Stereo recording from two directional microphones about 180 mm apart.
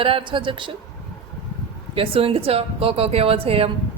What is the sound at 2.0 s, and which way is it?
A woman's voice, 30° right (ahead or behind).